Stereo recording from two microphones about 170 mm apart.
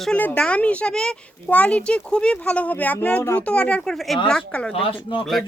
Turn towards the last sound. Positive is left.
turn(degrees=0)  # may be behind; listen again after turning